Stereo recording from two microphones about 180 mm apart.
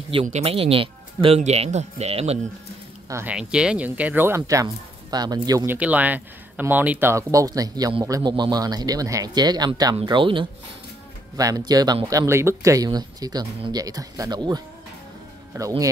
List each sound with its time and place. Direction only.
0.1 s speech: 30° right (ahead or behind)
3.1 s speech: 15° right (ahead or behind)
3.3 s speech: 5° right (ahead or behind); by 5.7 s 20° right (ahead or behind)
5.7 s speech: 10° right (ahead or behind)